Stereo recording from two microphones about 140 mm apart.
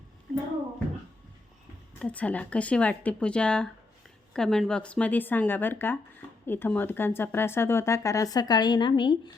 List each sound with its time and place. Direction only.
2.0 s speech: 10° left (ahead or behind); by 9.3 s 35° left (ahead or behind)